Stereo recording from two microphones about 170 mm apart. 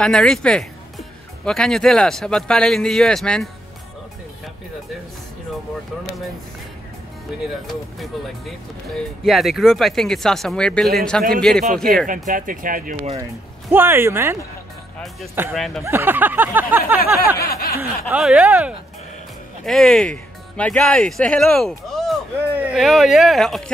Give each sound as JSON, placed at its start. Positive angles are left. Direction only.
{"t": 0.0, "sound": "speech", "side_deg": 5}
{"t": 7.6, "sound": "speech", "side_deg": 0}
{"t": 12.1, "sound": "speech", "side_deg": -55}
{"t": 13.2, "sound": "speech", "side_deg": -15}
{"t": 15.5, "sound": "speech", "side_deg": 0}
{"t": 15.8, "sound": "speech", "side_deg": -15}
{"t": 17.5, "sound": "snicker", "side_deg": 60}
{"t": 17.7, "sound": "speech", "side_deg": -5}